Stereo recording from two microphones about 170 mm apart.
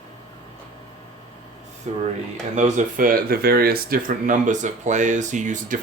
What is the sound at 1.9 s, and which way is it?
Speech, 40° right (ahead or behind).